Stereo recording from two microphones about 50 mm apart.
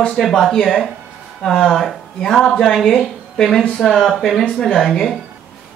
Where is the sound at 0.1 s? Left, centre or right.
Centre.